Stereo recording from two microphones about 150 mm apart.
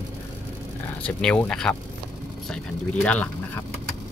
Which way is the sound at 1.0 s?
5° left (ahead or behind).